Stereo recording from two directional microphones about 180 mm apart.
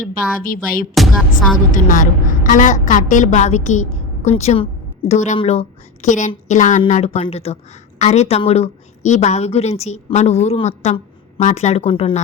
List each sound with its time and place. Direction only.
0.0 s a woman's voice: 50° left (ahead or behind); by 12.2 s 30° left (ahead or behind)